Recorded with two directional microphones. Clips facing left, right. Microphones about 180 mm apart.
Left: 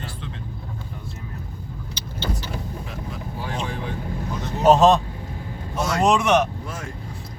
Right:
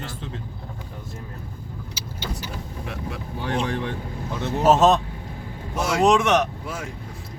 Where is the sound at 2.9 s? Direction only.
70° right (ahead or behind).